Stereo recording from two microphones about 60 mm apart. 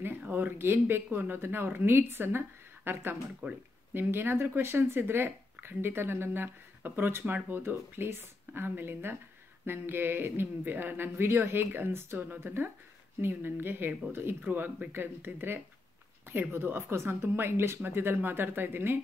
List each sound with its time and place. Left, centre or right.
0.3 s speech: right
7.6 s speech: right